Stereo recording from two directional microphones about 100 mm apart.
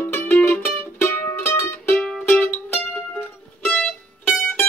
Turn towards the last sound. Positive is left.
turn(degrees=10)  # may be behind; listen again after turning